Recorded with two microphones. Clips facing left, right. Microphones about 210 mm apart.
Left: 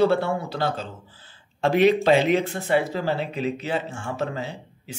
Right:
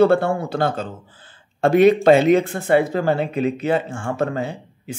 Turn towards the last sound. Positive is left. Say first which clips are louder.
# right 6 dB
turn(degrees=-50)  # may be behind; listen again after turning